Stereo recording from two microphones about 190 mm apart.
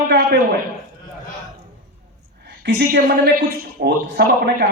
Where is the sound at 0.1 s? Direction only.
55° right (ahead or behind).